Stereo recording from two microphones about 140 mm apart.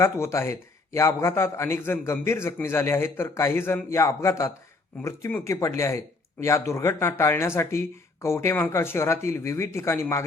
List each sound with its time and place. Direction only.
0.0 s a man's voice: 20° left (ahead or behind)